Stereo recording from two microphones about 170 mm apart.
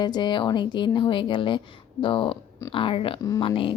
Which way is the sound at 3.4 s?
30° left (ahead or behind).